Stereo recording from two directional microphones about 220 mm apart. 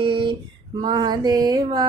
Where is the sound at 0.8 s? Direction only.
20° right (ahead or behind).